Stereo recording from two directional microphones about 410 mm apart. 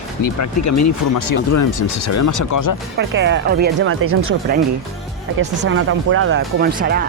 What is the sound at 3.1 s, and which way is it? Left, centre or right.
Speech, right.